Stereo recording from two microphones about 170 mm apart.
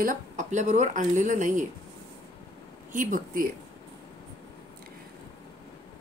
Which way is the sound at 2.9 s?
50° right (ahead or behind).